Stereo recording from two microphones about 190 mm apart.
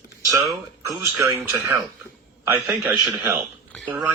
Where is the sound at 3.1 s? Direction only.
10° right (ahead or behind).